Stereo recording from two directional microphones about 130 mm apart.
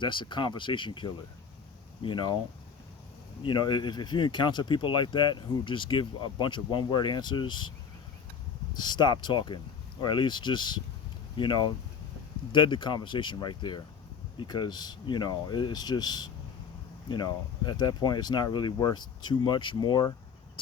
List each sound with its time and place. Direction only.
0.0 s speech: 40° left (ahead or behind)
3.4 s speech: 35° left (ahead or behind)
8.7 s speech: 35° left (ahead or behind)